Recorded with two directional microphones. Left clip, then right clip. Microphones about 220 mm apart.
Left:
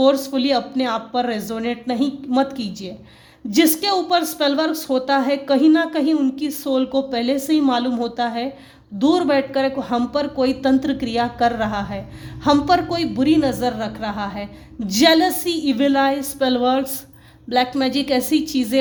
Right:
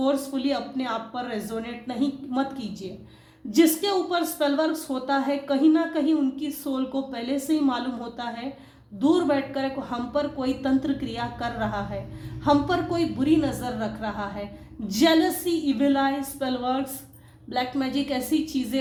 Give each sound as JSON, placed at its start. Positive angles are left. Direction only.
{"t": 0.0, "sound": "a woman's voice", "side_deg": 40}